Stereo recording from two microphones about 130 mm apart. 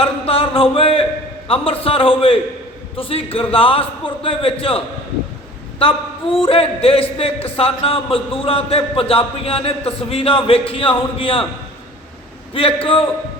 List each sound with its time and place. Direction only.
0.0 s a sound: 45° left (ahead or behind)
1.5 s a man's voice: 45° left (ahead or behind)
5.8 s a man's voice: 45° left (ahead or behind)
12.5 s a man's voice: 45° left (ahead or behind)